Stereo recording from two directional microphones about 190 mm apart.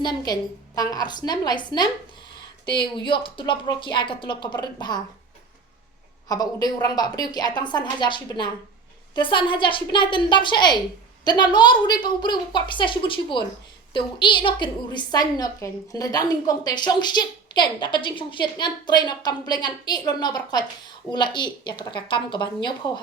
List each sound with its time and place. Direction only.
0.0 s a woman's voice: 20° left (ahead or behind)
2.8 s a woman's voice: 25° left (ahead or behind)
6.2 s a woman's voice: 20° left (ahead or behind)